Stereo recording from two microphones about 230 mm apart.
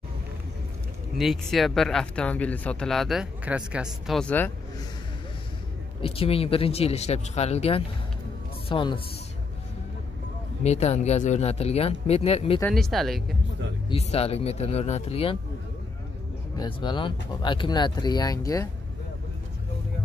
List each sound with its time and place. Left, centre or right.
1.1 s speech: centre
6.0 s speech: left
10.6 s speech: left
12.5 s speech: centre
13.8 s speech: left
16.5 s speech: centre